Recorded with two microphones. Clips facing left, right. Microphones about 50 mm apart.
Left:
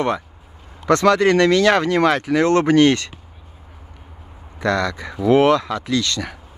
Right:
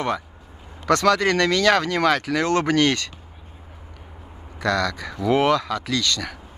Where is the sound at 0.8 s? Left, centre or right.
Left.